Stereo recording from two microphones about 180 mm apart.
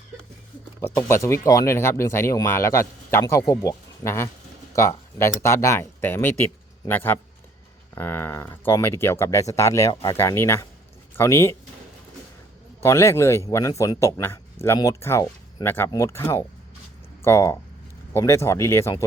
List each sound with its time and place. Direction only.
0.9 s speech: 15° left (ahead or behind)
12.8 s speech: 15° left (ahead or behind)